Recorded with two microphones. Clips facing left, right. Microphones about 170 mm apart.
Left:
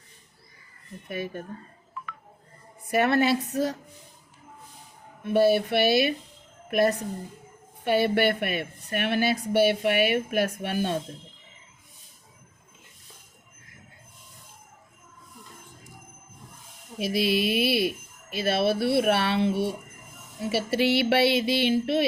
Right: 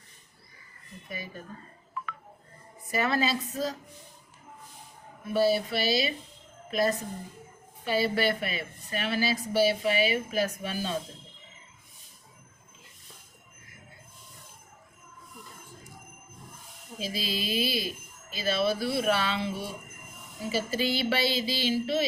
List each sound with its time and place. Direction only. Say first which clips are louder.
1.0 s a woman's voice: left 8 dB; 60° left (ahead or behind)
2.9 s a woman's voice: left 6 dB; 65° left (ahead or behind)
5.2 s a woman's voice: left 4 dB; 60° left (ahead or behind)
17.0 s a woman's voice: left 9 dB; 65° left (ahead or behind)